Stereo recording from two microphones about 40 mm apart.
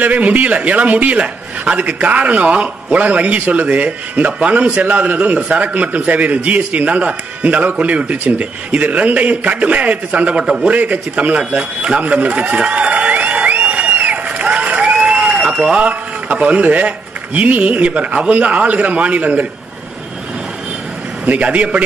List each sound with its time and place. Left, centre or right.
0.0 s a man's voice: right
11.3 s a man's voice: right
13.0 s a sound: right
14.9 s crowd: right
15.1 s a sound: centre
15.6 s a man's voice: right
21.3 s a man's voice: right